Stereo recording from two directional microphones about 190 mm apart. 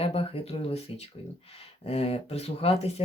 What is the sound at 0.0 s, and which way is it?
Speech, 30° left (ahead or behind).